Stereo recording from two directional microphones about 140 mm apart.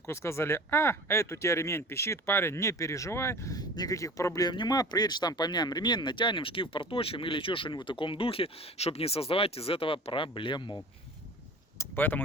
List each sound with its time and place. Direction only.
0.0 s speech: 20° left (ahead or behind); by 10.8 s 35° left (ahead or behind)
11.8 s speech: 15° left (ahead or behind)